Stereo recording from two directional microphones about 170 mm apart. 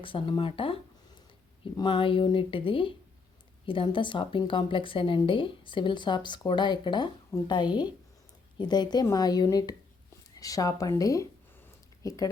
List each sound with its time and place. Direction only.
0.0 s a woman's voice: 30° left (ahead or behind)